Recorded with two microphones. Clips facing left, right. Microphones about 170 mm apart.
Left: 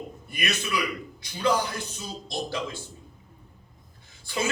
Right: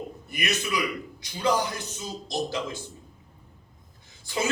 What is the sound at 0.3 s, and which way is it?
Speech, 20° right (ahead or behind).